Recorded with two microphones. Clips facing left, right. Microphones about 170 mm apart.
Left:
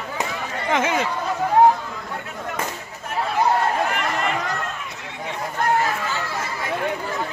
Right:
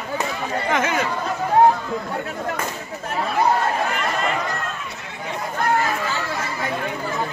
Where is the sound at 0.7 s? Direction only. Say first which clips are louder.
Left 2 dB; 25° left (ahead or behind).